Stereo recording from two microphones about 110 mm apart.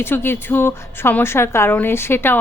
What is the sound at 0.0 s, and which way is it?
A woman's voice, 20° left (ahead or behind).